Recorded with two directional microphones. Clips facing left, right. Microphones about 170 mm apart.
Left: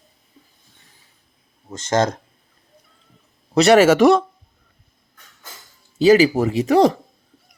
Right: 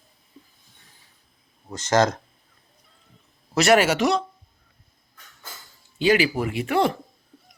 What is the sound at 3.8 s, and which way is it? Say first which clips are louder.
Speech: left 9 dB; 50° left (ahead or behind).